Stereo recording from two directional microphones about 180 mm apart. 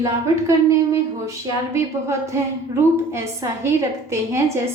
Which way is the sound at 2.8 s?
15° right (ahead or behind).